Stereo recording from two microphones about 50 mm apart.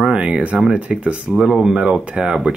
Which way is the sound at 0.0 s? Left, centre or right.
Right.